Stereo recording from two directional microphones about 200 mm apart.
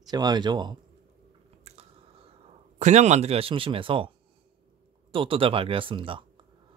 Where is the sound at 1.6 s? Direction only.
30° right (ahead or behind).